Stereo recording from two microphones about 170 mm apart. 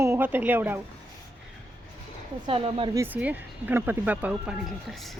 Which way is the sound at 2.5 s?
35° right (ahead or behind).